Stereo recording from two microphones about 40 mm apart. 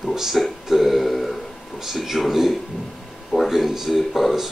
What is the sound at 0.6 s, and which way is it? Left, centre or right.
Burping, centre.